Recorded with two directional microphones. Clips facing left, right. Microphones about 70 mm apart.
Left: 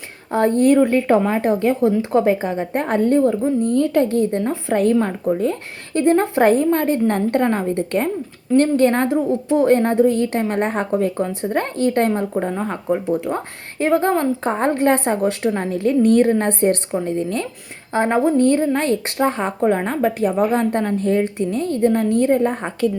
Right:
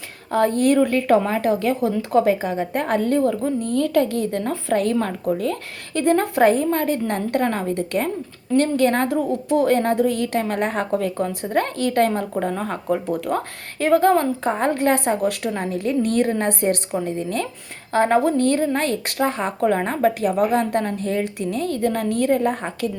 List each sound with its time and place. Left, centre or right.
0.3 s a woman's voice: left
12.3 s a woman's voice: centre; by 17.4 s left
17.9 s speech: left